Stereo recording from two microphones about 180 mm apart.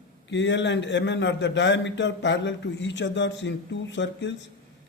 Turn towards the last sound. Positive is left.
turn(degrees=85)